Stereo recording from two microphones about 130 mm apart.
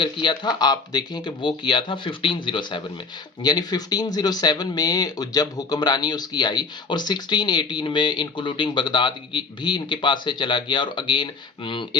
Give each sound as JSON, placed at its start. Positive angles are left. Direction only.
{"t": 0.0, "sound": "speech", "side_deg": 40}